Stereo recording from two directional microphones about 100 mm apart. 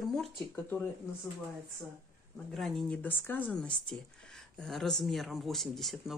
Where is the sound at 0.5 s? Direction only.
15° left (ahead or behind).